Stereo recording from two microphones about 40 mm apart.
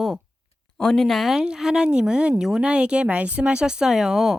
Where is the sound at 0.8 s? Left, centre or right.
Centre.